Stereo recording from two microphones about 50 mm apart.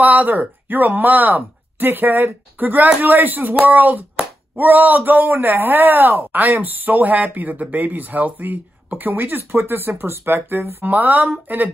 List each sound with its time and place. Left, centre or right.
0.0 s a woman's voice: right
10.8 s speech: right